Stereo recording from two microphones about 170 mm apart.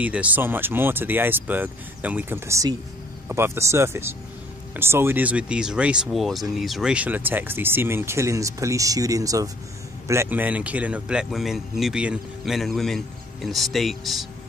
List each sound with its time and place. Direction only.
0.0 s a man's voice: 10° right (ahead or behind)